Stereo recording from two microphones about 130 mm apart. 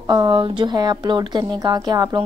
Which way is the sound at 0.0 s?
35° right (ahead or behind).